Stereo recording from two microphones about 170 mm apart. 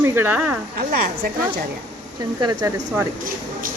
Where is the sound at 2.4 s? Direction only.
25° right (ahead or behind).